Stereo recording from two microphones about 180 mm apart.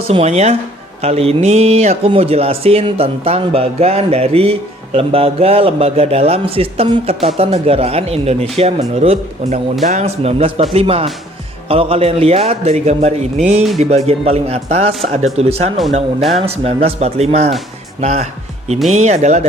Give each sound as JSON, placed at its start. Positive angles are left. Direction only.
{"t": 0.1, "sound": "speech", "side_deg": -35}